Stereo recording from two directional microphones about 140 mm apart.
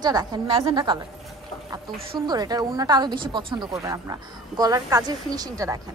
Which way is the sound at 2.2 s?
30° right (ahead or behind).